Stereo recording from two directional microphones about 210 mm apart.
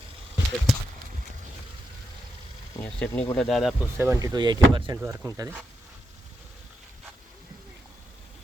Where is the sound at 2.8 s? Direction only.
5° left (ahead or behind).